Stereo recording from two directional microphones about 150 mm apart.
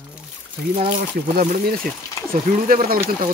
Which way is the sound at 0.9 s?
75° right (ahead or behind).